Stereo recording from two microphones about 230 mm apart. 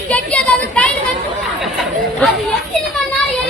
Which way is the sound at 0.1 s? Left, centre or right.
Centre.